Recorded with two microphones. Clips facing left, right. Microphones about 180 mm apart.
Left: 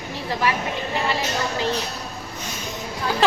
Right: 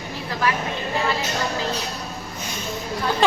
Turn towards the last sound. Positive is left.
turn(degrees=0)  # may be behind; listen again after turning